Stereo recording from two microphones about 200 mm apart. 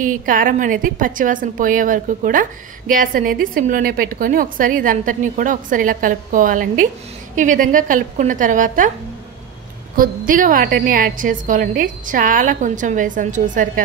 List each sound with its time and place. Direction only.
0.0 s a woman's voice: 40° right (ahead or behind)
9.9 s a woman's voice: 45° right (ahead or behind)